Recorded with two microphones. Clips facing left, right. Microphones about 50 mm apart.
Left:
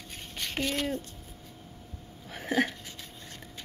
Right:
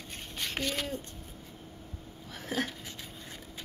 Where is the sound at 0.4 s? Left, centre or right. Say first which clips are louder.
Left 2 dB; centre.